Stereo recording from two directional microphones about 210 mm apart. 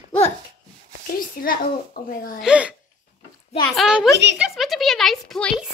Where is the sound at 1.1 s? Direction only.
45° left (ahead or behind).